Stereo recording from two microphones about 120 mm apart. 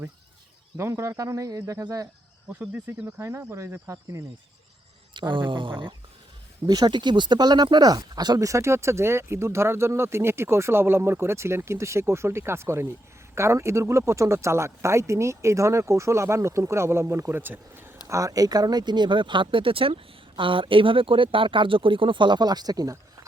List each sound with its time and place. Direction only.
0.8 s speech: 20° right (ahead or behind)
2.5 s speech: 15° right (ahead or behind)
5.1 s speech: 40° right (ahead or behind); by 17.9 s 15° right (ahead or behind)
18.1 s speech: 25° right (ahead or behind)